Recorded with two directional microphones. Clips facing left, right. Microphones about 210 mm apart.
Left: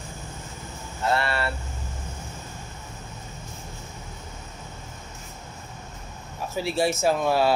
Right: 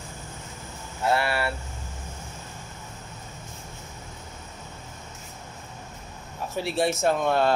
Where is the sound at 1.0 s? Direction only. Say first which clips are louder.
Right 1 dB; 10° right (ahead or behind).